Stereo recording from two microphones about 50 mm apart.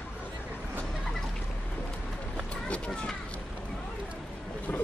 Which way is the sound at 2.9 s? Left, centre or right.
Centre.